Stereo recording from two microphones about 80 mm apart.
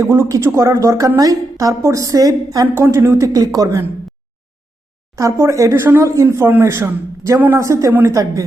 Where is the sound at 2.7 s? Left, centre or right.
Right.